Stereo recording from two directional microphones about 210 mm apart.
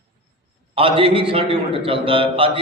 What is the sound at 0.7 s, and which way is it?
A man's voice, 25° right (ahead or behind).